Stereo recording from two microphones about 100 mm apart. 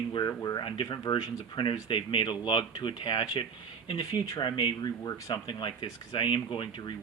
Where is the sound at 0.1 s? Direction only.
40° left (ahead or behind).